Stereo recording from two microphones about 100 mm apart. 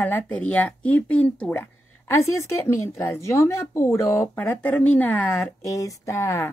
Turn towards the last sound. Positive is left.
turn(degrees=25)  # may be behind; listen again after turning